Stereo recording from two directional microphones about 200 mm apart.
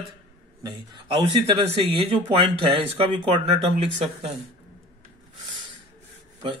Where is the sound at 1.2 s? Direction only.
25° right (ahead or behind).